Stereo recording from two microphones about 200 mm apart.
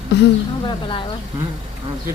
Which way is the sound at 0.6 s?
25° left (ahead or behind).